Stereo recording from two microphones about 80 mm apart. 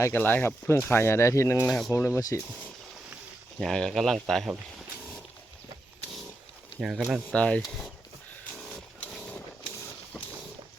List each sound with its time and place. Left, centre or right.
0.0 s speech: left
3.6 s speech: centre
6.7 s speech: centre
7.3 s speech: centre
9.0 s wild animals: centre